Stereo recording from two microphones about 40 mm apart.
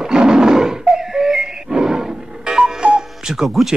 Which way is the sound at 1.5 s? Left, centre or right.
Centre.